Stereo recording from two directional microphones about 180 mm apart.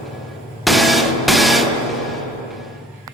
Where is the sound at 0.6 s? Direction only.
Centre (ahead or behind).